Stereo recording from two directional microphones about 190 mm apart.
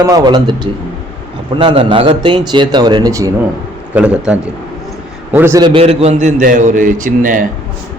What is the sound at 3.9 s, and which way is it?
A man's voice, 5° right (ahead or behind).